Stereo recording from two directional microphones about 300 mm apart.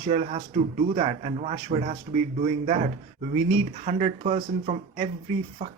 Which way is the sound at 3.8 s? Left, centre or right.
Right.